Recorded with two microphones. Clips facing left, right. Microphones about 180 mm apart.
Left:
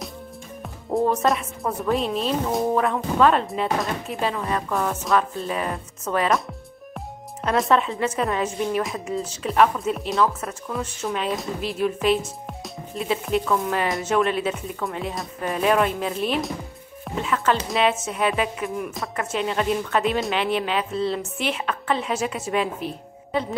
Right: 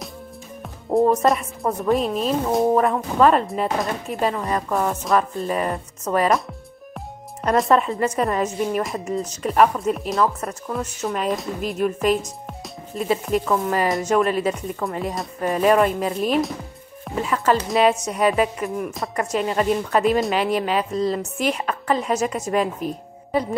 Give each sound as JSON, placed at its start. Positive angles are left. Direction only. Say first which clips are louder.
{"t": 1.2, "sound": "a woman's voice", "louder": "right 3 dB", "side_deg": 0}
{"t": 7.4, "sound": "a woman's voice", "louder": "right 3 dB", "side_deg": 0}